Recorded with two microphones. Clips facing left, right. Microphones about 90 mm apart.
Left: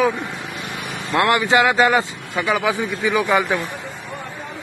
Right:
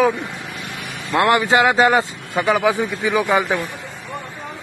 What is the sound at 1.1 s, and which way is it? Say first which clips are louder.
Speech: right 1 dB; 25° right (ahead or behind).